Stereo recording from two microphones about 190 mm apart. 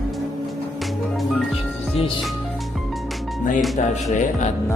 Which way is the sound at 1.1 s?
Centre (ahead or behind).